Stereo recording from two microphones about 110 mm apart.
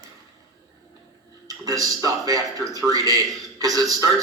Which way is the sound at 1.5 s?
35° right (ahead or behind).